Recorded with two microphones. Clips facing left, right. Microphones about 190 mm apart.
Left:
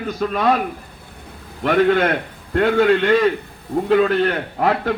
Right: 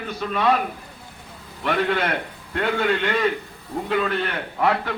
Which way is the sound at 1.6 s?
45° left (ahead or behind).